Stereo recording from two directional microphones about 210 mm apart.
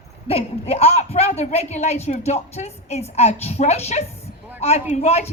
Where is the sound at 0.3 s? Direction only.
30° left (ahead or behind).